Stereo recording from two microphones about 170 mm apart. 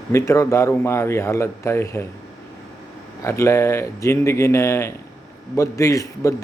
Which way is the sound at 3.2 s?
15° left (ahead or behind).